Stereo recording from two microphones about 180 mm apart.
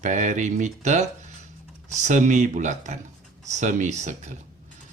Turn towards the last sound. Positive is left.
turn(degrees=-40)  # may be behind; listen again after turning